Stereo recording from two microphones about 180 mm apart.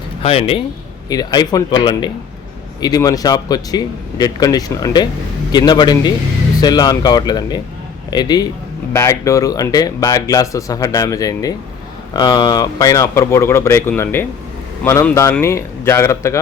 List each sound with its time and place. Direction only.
0.2 s a man's voice: 30° left (ahead or behind); by 16.4 s 15° left (ahead or behind)